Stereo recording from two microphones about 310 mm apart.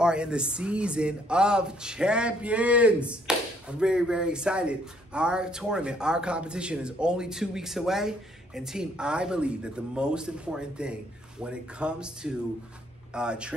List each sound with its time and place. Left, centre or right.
0.0 s speech: centre